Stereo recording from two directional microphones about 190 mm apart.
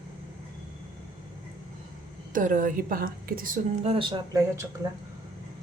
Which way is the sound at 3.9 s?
25° right (ahead or behind).